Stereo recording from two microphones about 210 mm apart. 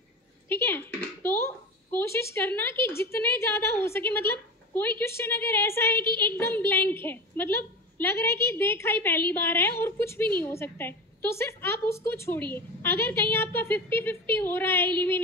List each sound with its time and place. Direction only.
0.5 s a woman's voice: 10° left (ahead or behind)